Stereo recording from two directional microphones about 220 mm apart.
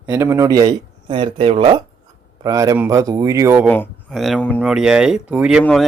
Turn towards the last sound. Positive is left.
turn(degrees=-5)  # may be behind; listen again after turning